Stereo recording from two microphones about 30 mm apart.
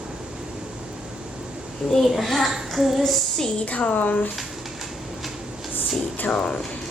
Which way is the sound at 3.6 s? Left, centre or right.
Left.